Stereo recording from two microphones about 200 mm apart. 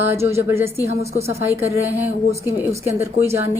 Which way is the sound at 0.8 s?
30° right (ahead or behind).